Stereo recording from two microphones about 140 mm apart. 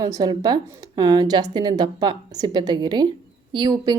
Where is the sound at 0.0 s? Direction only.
25° right (ahead or behind).